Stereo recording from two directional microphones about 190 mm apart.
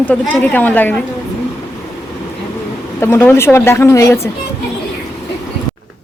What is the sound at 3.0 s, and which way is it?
A woman's voice, 10° left (ahead or behind).